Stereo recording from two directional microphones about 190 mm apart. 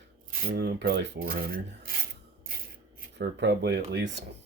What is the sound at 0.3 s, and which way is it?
Rub, 55° right (ahead or behind).